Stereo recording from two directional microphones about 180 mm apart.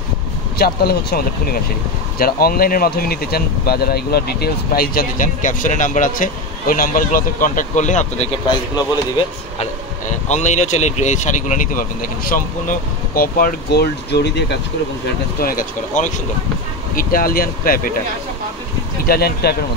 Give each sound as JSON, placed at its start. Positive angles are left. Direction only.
{"t": 0.6, "sound": "speech", "side_deg": 60}
{"t": 9.6, "sound": "speech", "side_deg": 40}
{"t": 15.4, "sound": "speech", "side_deg": 45}
{"t": 19.0, "sound": "speech", "side_deg": 60}